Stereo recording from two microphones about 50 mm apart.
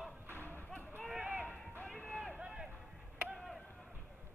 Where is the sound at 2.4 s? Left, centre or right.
Centre.